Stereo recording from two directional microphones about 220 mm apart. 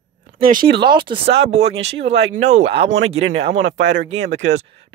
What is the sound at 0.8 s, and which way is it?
Speech, 20° right (ahead or behind).